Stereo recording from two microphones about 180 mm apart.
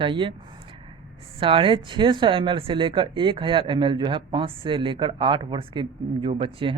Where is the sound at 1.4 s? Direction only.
30° right (ahead or behind).